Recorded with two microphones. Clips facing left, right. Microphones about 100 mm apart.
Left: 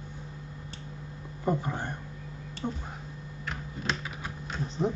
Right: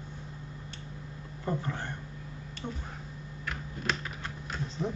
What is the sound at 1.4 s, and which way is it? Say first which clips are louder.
Speech: left 4 dB; 15° left (ahead or behind).